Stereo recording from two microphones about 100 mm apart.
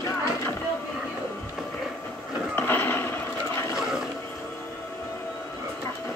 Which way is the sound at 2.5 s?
20° left (ahead or behind).